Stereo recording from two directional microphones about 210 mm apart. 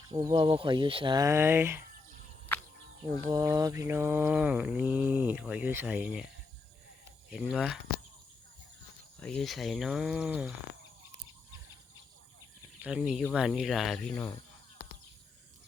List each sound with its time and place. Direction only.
0.1 s speech: 20° right (ahead or behind)
3.2 s mantra: 15° right (ahead or behind)
7.3 s speech: 5° right (ahead or behind)
9.2 s speech: centre (ahead or behind)
12.8 s speech: 5° right (ahead or behind)